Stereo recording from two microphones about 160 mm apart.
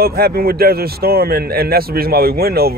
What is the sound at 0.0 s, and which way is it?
Speech, 75° right (ahead or behind).